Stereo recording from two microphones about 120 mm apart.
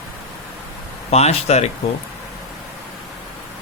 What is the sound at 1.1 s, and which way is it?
Speech, 65° left (ahead or behind).